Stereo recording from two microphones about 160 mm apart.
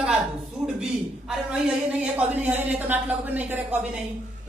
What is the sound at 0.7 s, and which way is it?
A man's voice, 5° right (ahead or behind).